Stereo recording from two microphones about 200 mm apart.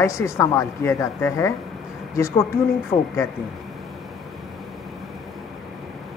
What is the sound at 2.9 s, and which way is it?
Speech, 30° left (ahead or behind).